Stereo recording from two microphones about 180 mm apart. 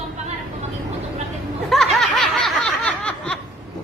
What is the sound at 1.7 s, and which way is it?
Snicker, centre (ahead or behind).